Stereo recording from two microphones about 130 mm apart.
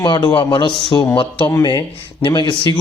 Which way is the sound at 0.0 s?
35° left (ahead or behind).